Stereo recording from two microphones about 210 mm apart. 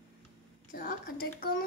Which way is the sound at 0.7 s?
40° left (ahead or behind).